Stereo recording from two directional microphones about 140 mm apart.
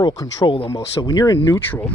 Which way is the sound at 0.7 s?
20° left (ahead or behind).